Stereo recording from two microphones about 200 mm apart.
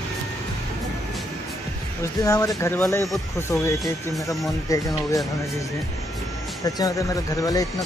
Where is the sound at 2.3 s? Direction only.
15° left (ahead or behind).